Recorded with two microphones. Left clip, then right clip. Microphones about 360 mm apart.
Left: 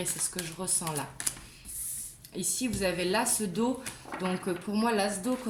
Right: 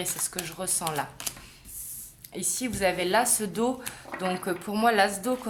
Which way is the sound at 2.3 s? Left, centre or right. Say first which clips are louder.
Right 1 dB; centre.